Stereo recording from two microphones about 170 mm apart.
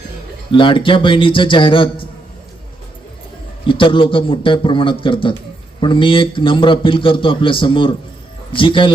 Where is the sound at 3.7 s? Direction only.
30° left (ahead or behind).